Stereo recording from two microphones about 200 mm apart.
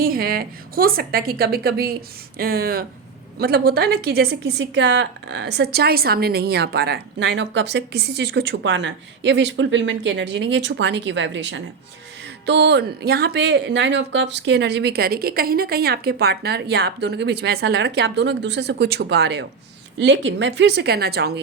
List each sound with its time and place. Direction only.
0.0 s a woman's voice: 45° right (ahead or behind)